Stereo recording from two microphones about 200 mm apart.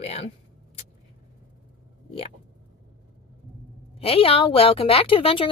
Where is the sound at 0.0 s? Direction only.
30° left (ahead or behind).